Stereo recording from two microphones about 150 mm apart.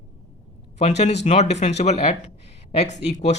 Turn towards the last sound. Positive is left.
turn(degrees=50)  # may be behind; listen again after turning